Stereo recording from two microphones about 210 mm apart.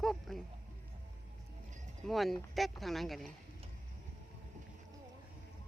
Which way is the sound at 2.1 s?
Centre (ahead or behind).